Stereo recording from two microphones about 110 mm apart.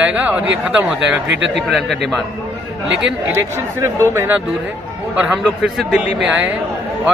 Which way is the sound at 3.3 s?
25° right (ahead or behind).